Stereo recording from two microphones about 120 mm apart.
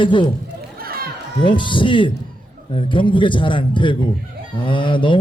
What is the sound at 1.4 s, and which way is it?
A man's voice, 45° left (ahead or behind).